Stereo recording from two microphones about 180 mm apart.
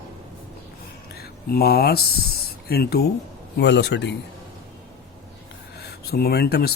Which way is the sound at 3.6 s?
70° left (ahead or behind).